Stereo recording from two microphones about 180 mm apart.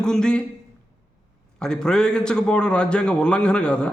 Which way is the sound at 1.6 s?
5° left (ahead or behind).